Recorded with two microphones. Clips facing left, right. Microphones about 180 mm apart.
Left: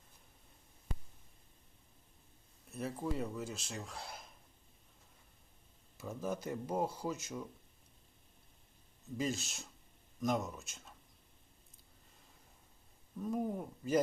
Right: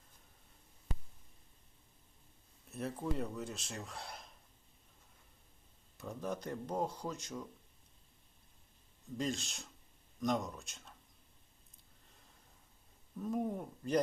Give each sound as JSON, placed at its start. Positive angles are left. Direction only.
{"t": 2.6, "sound": "speech", "side_deg": 0}
{"t": 6.0, "sound": "speech", "side_deg": 5}
{"t": 9.1, "sound": "speech", "side_deg": 5}
{"t": 13.1, "sound": "speech", "side_deg": 0}